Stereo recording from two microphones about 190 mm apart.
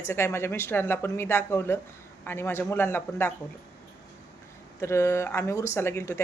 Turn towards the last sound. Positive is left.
turn(degrees=15)  # may be behind; listen again after turning